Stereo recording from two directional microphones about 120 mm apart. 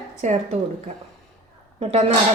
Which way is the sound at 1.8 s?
60° right (ahead or behind).